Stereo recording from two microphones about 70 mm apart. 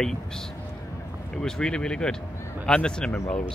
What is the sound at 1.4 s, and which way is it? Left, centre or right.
Speech, centre.